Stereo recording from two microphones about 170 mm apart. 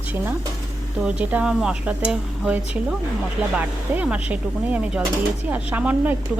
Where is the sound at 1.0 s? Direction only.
10° right (ahead or behind).